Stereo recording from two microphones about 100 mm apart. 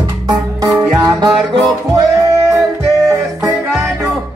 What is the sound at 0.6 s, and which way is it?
Music, 40° right (ahead or behind).